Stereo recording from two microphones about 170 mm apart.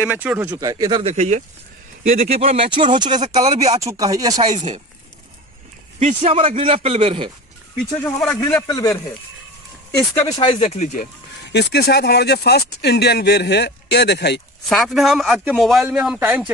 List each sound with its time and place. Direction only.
0.0 s speech: 10° right (ahead or behind)
0.6 s speech: 20° right (ahead or behind)
1.0 s a man's voice: 40° right (ahead or behind)
3.4 s a man's voice: 40° right (ahead or behind)
3.7 s speech: 20° right (ahead or behind)
4.6 s a man's voice: 40° right (ahead or behind)
5.9 s a man's voice: 40° right (ahead or behind)
7.9 s speech: 5° left (ahead or behind)
9.9 s speech: 20° left (ahead or behind); by 11.1 s 45° left (ahead or behind)
11.4 s speech: 80° left
14.7 s a man's voice: centre (ahead or behind)